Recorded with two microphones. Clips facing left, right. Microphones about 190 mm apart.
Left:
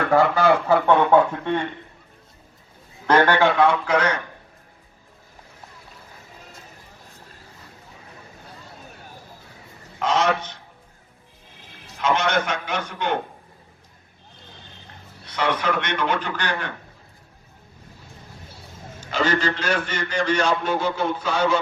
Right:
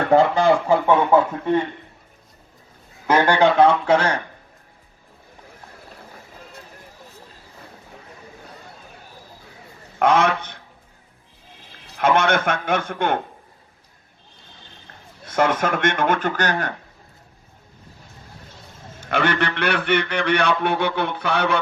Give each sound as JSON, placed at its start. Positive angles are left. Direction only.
{"t": 0.1, "sound": "speech", "side_deg": -20}
{"t": 3.1, "sound": "speech", "side_deg": -10}
{"t": 3.6, "sound": "speech", "side_deg": -30}
{"t": 10.0, "sound": "a man's voice", "side_deg": -55}
{"t": 11.9, "sound": "a man's voice", "side_deg": -55}
{"t": 15.2, "sound": "a man's voice", "side_deg": -50}
{"t": 18.9, "sound": "a man's voice", "side_deg": -60}